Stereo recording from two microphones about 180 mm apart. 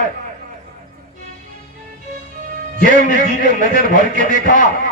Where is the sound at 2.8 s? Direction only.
50° left (ahead or behind).